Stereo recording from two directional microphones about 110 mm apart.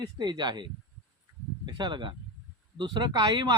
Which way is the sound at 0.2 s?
40° right (ahead or behind).